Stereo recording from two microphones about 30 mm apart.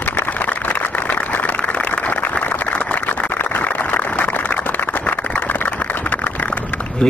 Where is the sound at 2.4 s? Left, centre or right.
Left.